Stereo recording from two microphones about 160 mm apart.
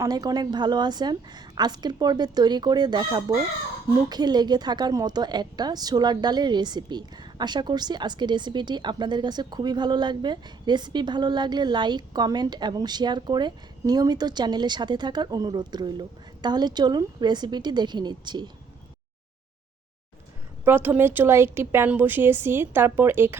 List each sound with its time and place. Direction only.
0.0 s a woman's voice: 25° right (ahead or behind)
20.7 s a woman's voice: 10° right (ahead or behind)